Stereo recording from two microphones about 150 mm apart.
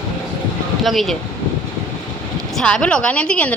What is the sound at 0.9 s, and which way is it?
Speech, centre (ahead or behind).